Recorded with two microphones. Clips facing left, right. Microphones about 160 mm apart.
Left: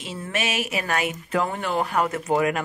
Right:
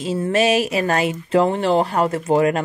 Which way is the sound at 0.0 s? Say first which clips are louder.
Right 11 dB; 35° right (ahead or behind).